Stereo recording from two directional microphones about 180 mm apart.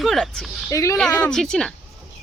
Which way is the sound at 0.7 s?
15° left (ahead or behind).